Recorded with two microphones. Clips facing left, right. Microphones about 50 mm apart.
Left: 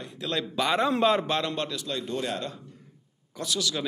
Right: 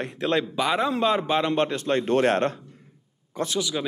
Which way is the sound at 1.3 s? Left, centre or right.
Right.